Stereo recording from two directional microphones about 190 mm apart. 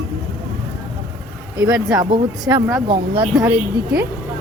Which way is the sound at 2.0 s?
20° right (ahead or behind).